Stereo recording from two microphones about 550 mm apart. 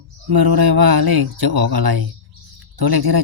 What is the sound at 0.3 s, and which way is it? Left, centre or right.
Speech, right.